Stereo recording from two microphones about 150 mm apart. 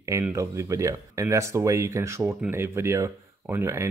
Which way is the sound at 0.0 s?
20° right (ahead or behind).